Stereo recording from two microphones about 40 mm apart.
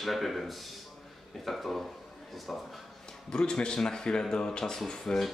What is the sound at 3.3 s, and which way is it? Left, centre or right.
A man's voice, left.